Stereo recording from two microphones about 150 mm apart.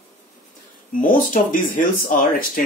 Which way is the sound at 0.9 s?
65° left (ahead or behind).